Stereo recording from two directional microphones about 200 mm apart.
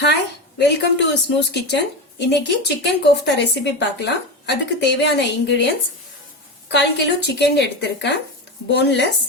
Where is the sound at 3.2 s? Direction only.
60° left (ahead or behind).